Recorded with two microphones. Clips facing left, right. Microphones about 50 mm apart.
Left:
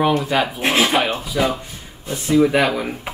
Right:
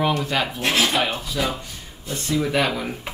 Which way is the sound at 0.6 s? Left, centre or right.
Left.